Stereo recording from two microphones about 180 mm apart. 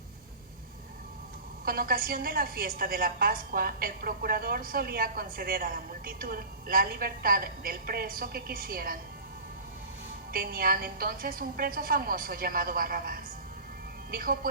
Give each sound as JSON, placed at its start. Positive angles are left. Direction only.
{"t": 1.6, "sound": "a woman's voice", "side_deg": -55}
{"t": 10.3, "sound": "a woman's voice", "side_deg": -55}